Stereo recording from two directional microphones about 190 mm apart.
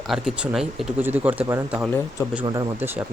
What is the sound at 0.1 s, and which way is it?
Speech, centre (ahead or behind).